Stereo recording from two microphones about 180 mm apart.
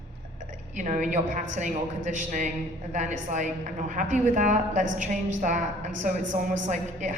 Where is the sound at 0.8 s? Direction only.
45° right (ahead or behind).